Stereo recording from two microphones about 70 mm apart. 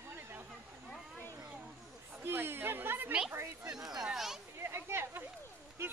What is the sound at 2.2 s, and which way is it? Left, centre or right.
Speech, right.